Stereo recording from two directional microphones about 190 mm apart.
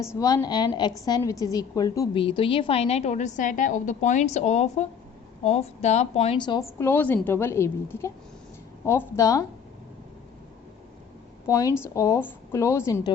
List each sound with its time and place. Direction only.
0.0 s a woman's voice: 15° left (ahead or behind)
11.4 s a woman's voice: 15° left (ahead or behind)